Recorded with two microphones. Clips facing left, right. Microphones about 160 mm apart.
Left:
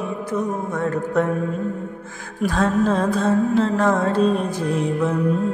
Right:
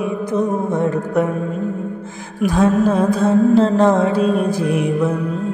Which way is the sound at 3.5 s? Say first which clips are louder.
Right 5 dB; 30° right (ahead or behind).